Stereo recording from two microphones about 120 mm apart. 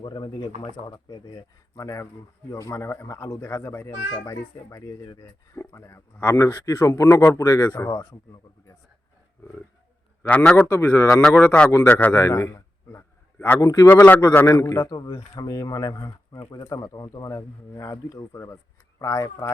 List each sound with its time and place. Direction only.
0.0 s speech: 35° left (ahead or behind)
10.2 s a man's voice: 10° left (ahead or behind)
11.1 s a man's voice: centre (ahead or behind)
12.2 s a man's voice: 25° left (ahead or behind)
13.9 s speech: 20° left (ahead or behind)